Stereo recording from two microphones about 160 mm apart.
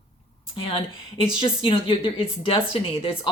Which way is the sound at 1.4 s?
35° left (ahead or behind).